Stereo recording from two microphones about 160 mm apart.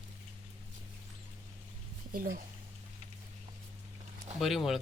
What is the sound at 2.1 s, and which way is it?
Speech, 60° right (ahead or behind).